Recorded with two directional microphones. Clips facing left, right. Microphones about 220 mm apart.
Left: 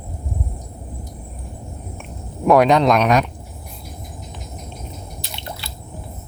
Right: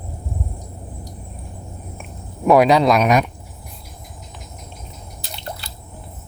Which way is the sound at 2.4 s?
Centre (ahead or behind).